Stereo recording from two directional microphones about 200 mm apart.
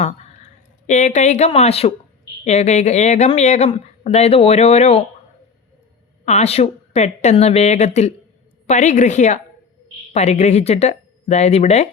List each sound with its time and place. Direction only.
0.9 s speech: 35° left (ahead or behind)
6.2 s speech: 35° left (ahead or behind)